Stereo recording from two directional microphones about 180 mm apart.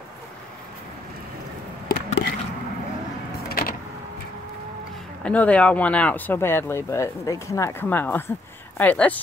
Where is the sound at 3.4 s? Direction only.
55° left (ahead or behind).